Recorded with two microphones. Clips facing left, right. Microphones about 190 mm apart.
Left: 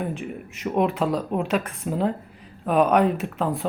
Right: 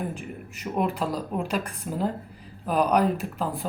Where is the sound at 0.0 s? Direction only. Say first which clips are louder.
Left 4 dB; centre (ahead or behind).